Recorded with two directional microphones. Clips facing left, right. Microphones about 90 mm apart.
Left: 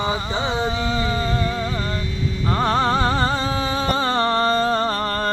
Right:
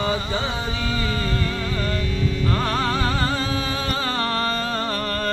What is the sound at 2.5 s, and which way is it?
Music, 30° left (ahead or behind).